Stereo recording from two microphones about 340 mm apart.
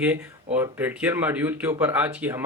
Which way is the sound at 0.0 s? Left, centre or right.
Centre.